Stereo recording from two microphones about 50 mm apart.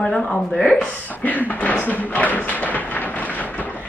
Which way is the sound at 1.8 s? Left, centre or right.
Left.